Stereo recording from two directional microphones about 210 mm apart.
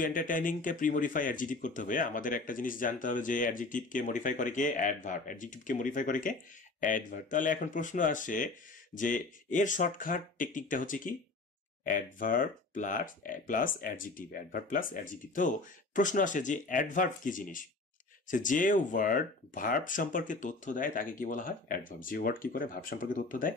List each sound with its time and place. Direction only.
0.0 s speech: 40° left (ahead or behind)